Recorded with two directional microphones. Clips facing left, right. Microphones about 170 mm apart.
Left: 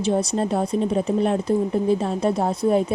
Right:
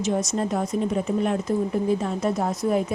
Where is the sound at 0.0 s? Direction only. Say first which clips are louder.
Left 3 dB; 30° left (ahead or behind).